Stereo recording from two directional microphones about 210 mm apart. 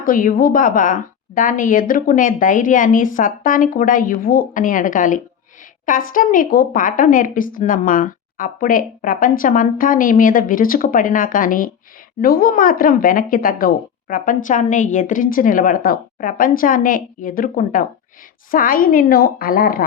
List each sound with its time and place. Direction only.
0.0 s a woman's voice: 40° left (ahead or behind)